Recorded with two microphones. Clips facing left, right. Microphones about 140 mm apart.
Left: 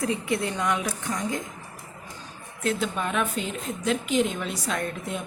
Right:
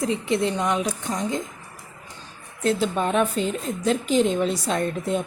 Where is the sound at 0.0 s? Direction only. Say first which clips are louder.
Right 4 dB; 25° right (ahead or behind).